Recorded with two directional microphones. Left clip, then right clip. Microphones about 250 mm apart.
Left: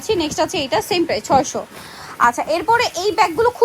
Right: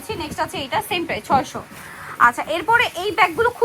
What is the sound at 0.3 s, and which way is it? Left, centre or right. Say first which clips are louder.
A woman's voice: left 4 dB; left.